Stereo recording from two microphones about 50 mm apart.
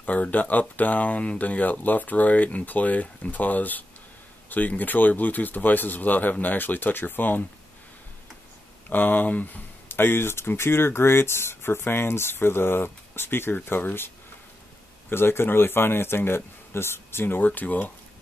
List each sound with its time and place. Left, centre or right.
0.0 s speech: left
8.8 s speech: left
17.5 s speech: left